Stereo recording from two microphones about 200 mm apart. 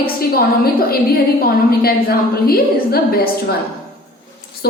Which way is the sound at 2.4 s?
50° left (ahead or behind).